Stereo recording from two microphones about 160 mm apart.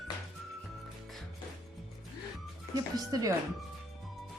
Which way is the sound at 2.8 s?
25° right (ahead or behind).